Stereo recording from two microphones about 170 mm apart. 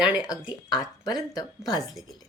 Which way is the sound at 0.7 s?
25° left (ahead or behind).